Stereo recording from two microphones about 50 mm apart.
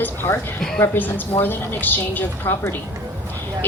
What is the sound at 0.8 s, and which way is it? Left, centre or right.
A woman's voice, left.